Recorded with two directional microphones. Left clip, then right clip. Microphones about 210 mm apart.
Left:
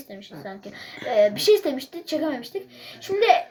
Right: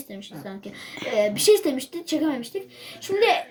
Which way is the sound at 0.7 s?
10° left (ahead or behind).